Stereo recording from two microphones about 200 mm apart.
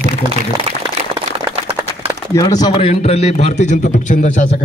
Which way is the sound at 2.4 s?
20° left (ahead or behind).